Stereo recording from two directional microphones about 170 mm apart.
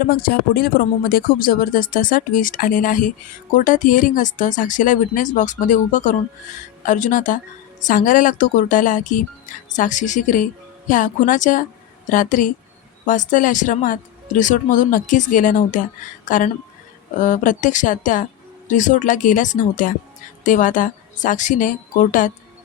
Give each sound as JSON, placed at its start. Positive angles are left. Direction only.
{"t": 0.1, "sound": "speech", "side_deg": 60}